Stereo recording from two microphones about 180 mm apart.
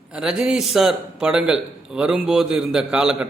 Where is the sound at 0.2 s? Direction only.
5° right (ahead or behind).